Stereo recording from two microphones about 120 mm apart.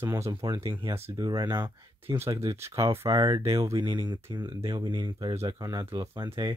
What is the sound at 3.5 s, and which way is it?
Speech, 25° right (ahead or behind).